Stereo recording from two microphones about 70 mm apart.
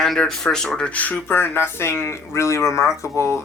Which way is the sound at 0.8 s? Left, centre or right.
Left.